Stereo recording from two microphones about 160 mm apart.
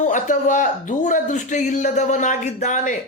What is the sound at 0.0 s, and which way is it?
Speech, 50° left (ahead or behind).